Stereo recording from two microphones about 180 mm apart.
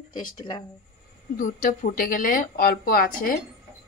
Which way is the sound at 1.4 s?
50° left (ahead or behind).